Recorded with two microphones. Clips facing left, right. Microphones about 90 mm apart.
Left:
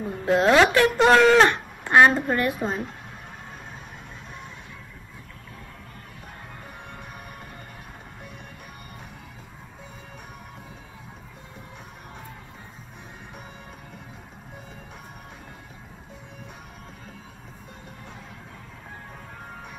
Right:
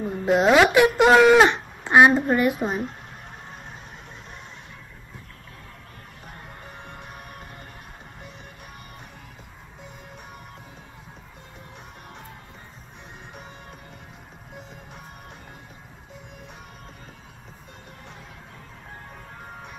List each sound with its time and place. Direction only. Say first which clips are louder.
0.0 s speech: right 1 dB; 20° right (ahead or behind)
6.9 s music: even; 15° right (ahead or behind)